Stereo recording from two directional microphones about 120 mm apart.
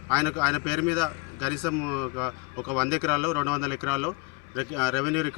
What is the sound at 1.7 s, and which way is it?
Speech, centre (ahead or behind).